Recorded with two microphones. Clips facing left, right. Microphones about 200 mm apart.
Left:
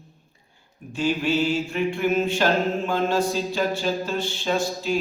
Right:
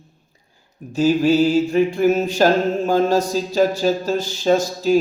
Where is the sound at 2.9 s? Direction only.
40° right (ahead or behind).